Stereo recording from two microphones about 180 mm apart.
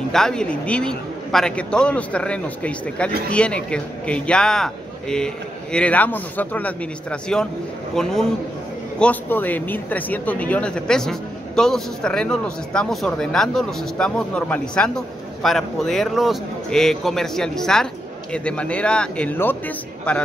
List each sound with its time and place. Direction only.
0.1 s a man's voice: 5° left (ahead or behind)